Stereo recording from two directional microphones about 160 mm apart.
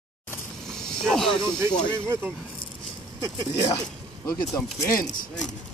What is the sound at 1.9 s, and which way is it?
Speech, 15° right (ahead or behind).